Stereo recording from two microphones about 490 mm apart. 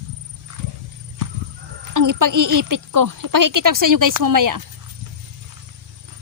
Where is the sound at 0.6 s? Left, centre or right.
Right.